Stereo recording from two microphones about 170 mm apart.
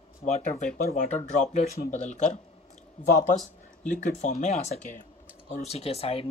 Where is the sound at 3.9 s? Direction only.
40° left (ahead or behind).